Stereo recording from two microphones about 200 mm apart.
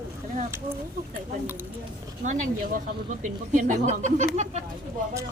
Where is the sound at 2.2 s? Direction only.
40° right (ahead or behind).